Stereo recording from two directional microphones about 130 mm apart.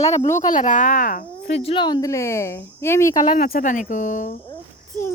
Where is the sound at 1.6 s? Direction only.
40° left (ahead or behind); by 3.2 s 20° left (ahead or behind).